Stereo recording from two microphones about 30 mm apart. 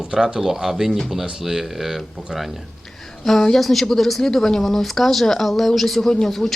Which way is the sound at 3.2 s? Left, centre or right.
Centre.